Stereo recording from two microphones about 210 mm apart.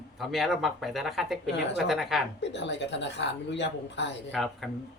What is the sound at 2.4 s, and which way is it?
Speech, 55° left (ahead or behind).